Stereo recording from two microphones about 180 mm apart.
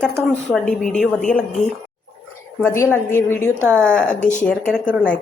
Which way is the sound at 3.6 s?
15° right (ahead or behind).